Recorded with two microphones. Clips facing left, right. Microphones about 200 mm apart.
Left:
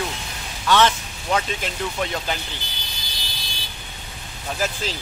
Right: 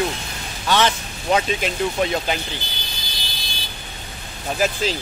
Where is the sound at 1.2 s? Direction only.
20° right (ahead or behind).